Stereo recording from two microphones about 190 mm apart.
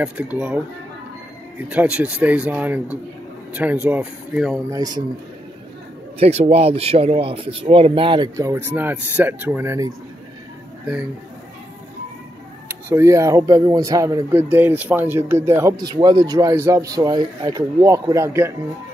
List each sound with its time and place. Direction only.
0.0 s speech: 10° right (ahead or behind)
1.7 s speech: 10° right (ahead or behind)
4.6 s speech: 20° right (ahead or behind)
6.1 s speech: 35° right (ahead or behind); by 9.9 s 15° right (ahead or behind)
12.9 s speech: 15° right (ahead or behind)